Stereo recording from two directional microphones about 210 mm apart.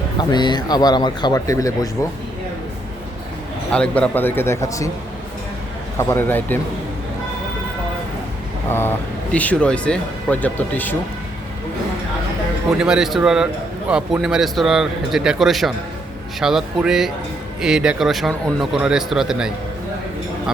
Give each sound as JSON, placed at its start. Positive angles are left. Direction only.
{"t": 0.2, "sound": "a man's voice", "side_deg": 20}
{"t": 3.7, "sound": "speech", "side_deg": 5}
{"t": 6.0, "sound": "speech", "side_deg": 10}
{"t": 9.3, "sound": "speech", "side_deg": 5}
{"t": 12.8, "sound": "a man's voice", "side_deg": -5}